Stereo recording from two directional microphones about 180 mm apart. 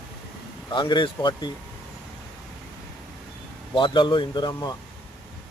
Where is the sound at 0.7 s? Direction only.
25° left (ahead or behind).